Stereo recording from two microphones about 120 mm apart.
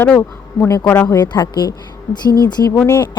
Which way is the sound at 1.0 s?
35° left (ahead or behind).